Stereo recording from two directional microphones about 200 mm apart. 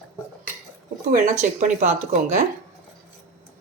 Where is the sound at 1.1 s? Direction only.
40° right (ahead or behind).